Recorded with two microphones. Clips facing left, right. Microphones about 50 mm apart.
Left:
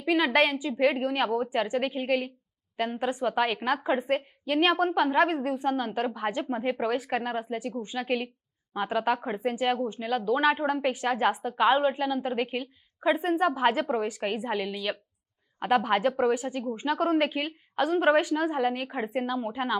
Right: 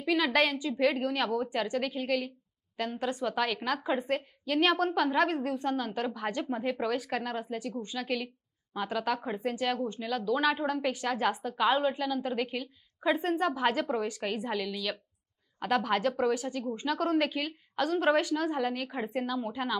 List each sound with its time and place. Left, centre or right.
0.0 s a woman's voice: left